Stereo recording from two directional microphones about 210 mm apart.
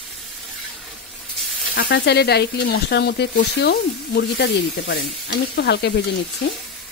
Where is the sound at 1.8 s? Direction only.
55° left (ahead or behind).